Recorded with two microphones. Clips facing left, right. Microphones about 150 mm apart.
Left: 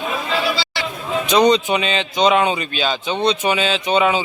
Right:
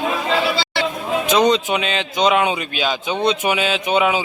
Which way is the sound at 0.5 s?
55° right (ahead or behind).